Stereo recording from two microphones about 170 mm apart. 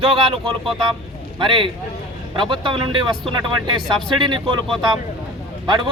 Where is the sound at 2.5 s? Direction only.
30° right (ahead or behind).